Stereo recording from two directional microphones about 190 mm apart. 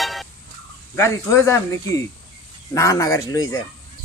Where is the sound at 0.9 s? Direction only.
15° left (ahead or behind).